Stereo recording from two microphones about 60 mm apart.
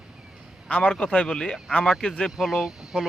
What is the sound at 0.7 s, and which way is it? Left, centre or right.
Speech, centre.